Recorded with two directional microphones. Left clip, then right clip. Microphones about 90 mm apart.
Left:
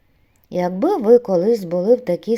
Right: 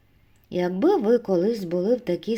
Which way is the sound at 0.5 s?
30° left (ahead or behind).